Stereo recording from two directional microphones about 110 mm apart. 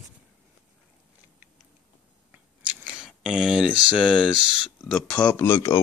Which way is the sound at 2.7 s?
10° right (ahead or behind).